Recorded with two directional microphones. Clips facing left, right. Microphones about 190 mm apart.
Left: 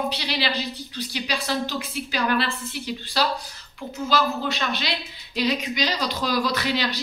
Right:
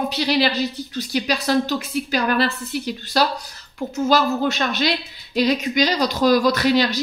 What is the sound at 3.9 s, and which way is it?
Speech, 45° right (ahead or behind).